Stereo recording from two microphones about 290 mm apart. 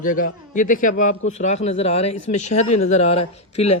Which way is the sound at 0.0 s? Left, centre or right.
Left.